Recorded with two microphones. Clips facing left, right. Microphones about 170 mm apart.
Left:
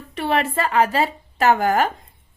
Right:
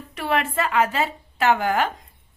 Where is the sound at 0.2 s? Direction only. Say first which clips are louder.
Left 2 dB; 30° left (ahead or behind).